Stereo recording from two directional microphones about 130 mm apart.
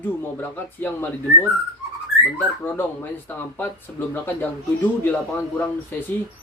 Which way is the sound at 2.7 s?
15° left (ahead or behind).